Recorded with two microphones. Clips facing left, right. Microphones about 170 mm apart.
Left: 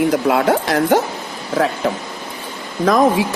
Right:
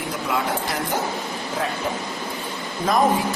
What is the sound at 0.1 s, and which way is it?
Speech, 75° left (ahead or behind).